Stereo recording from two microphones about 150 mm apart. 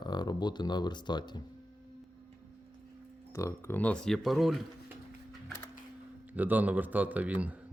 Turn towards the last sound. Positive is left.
turn(degrees=-10)  # may be behind; listen again after turning